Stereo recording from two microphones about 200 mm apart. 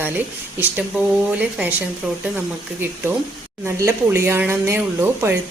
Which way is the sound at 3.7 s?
10° right (ahead or behind).